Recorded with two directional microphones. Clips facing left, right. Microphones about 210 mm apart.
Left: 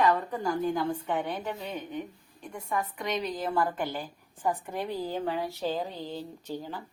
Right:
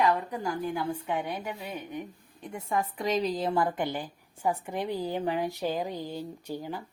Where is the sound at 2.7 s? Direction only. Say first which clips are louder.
Right 3 dB; 30° right (ahead or behind); by 6.8 s 15° right (ahead or behind).